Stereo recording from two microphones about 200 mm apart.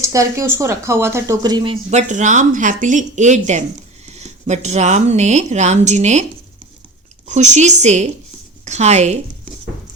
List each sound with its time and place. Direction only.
0.0 s speech: 15° right (ahead or behind); by 6.2 s 35° right (ahead or behind)
7.3 s speech: 35° right (ahead or behind)